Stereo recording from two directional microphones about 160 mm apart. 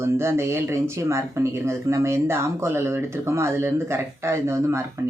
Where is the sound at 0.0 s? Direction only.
15° right (ahead or behind).